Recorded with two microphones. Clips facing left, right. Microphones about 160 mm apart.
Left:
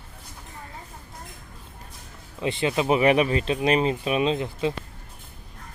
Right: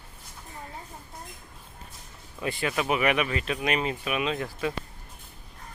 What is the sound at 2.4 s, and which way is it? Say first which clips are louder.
Speech: left 5 dB; 25° left (ahead or behind).